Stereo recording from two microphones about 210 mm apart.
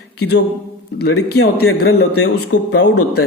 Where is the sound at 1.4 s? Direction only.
90° left.